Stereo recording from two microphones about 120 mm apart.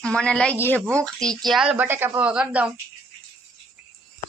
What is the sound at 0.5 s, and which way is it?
Speech, 20° left (ahead or behind).